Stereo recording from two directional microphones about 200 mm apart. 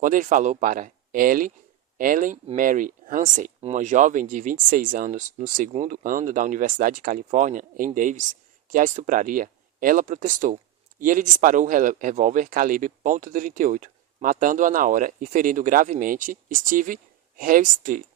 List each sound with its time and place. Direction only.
0.0 s speech: 40° right (ahead or behind)